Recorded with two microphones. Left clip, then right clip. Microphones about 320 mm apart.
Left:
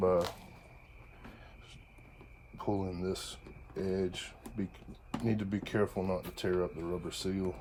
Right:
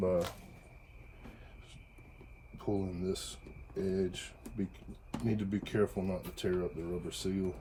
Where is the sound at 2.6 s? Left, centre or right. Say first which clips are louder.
Left 1 dB; left.